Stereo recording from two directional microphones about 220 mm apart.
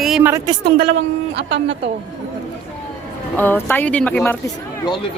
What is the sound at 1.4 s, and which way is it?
Speech, 55° right (ahead or behind).